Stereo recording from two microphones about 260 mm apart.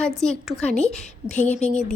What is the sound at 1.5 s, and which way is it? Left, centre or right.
Speech, left.